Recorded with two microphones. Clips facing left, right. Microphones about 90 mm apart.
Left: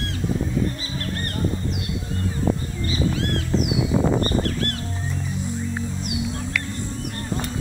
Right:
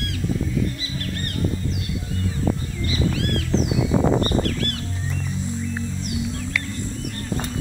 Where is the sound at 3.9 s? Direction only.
30° right (ahead or behind).